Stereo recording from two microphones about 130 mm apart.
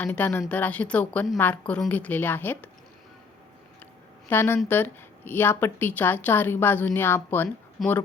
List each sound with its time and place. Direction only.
0.0 s speech: 10° left (ahead or behind)
4.3 s speech: 15° left (ahead or behind)
7.8 s speech: centre (ahead or behind)